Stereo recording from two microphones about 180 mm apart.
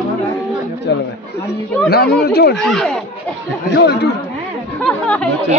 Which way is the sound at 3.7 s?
70° left (ahead or behind).